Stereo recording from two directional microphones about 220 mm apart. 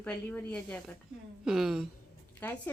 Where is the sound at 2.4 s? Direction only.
10° left (ahead or behind).